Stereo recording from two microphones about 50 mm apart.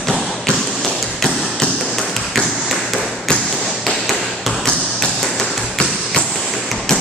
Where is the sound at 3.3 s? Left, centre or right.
Centre.